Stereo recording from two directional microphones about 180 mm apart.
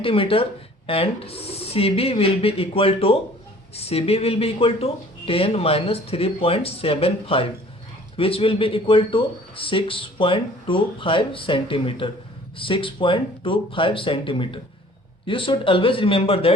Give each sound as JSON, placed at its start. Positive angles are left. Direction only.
{"t": 0.0, "sound": "speech", "side_deg": 30}